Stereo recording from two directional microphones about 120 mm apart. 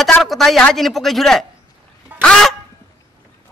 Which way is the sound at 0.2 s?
Centre (ahead or behind).